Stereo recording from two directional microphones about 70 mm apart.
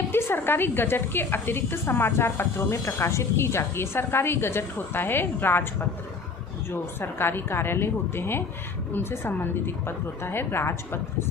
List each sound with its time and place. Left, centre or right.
0.1 s a woman's voice: left